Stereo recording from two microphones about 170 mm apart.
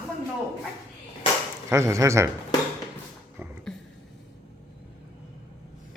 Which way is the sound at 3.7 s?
5° left (ahead or behind).